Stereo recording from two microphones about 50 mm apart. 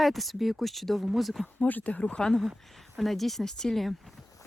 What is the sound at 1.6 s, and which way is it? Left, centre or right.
Speech, left.